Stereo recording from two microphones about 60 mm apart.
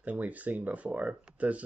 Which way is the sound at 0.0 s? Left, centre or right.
Right.